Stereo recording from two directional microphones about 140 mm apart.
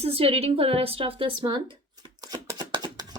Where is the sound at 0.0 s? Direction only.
45° right (ahead or behind); by 2.4 s 30° right (ahead or behind).